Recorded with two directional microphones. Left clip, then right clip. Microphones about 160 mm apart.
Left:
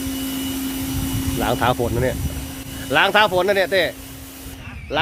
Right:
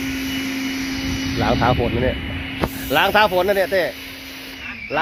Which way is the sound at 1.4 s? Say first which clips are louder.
Right 1 dB; 15° left (ahead or behind).